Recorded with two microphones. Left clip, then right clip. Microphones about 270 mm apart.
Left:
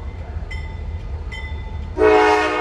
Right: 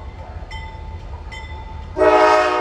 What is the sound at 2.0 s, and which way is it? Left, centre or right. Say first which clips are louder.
Train: right 1 dB; centre.